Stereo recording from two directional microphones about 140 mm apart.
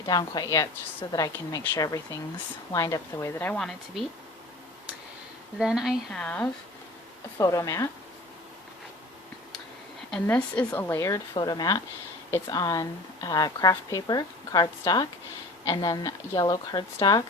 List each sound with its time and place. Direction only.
0.0 s speech: 30° left (ahead or behind)
2.7 s speech: 25° left (ahead or behind)
3.6 s a woman's voice: centre (ahead or behind)
5.5 s a woman's voice: 5° right (ahead or behind)
6.2 s a woman's voice: 10° left (ahead or behind)
7.3 s speech: 25° left (ahead or behind)
10.1 s a woman's voice: 10° left (ahead or behind); by 17.2 s 30° left (ahead or behind)